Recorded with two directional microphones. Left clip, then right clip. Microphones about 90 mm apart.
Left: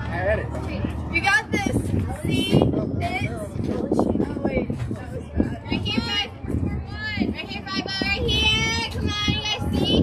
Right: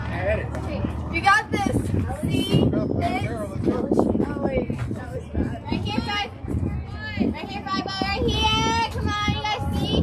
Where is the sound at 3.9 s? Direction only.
20° left (ahead or behind).